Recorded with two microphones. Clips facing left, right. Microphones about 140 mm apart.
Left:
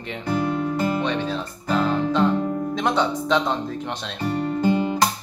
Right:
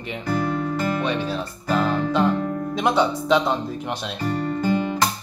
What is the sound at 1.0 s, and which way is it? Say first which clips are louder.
Music: even; 10° right (ahead or behind).